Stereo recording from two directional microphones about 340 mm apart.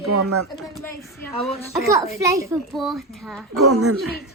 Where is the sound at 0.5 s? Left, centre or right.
Centre.